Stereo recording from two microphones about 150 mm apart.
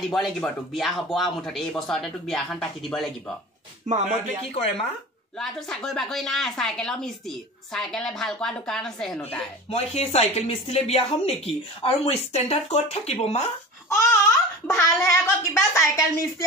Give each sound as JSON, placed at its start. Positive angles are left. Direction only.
{"t": 0.1, "sound": "a woman's voice", "side_deg": 0}
{"t": 3.8, "sound": "speech", "side_deg": -55}
{"t": 5.4, "sound": "a woman's voice", "side_deg": 5}
{"t": 9.7, "sound": "speech", "side_deg": 45}
{"t": 13.8, "sound": "babbling", "side_deg": 15}
{"t": 15.5, "sound": "a woman's voice", "side_deg": 20}